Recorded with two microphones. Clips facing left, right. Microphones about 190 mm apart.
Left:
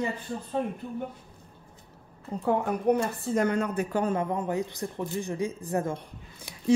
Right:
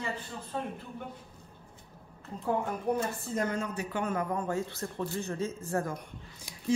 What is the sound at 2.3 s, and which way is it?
Speech, 80° left.